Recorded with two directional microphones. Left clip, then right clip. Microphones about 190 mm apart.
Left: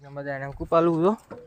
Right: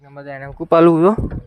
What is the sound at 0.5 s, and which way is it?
Speech, 50° right (ahead or behind).